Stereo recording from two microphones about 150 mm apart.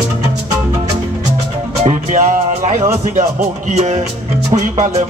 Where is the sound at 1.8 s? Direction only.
50° right (ahead or behind).